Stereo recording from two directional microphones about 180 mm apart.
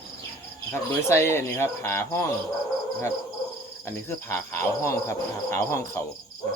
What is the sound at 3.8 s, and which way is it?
Cricket, 15° left (ahead or behind).